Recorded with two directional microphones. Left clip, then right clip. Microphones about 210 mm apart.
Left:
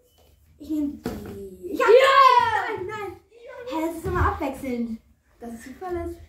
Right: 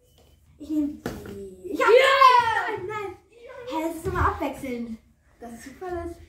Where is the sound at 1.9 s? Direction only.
Centre (ahead or behind).